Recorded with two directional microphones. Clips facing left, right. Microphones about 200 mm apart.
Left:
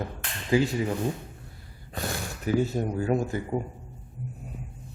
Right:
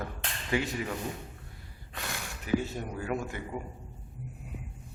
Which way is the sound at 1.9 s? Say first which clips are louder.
Left 7 dB; 35° left (ahead or behind).